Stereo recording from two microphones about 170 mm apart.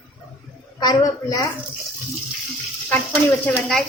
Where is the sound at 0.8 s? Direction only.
20° left (ahead or behind).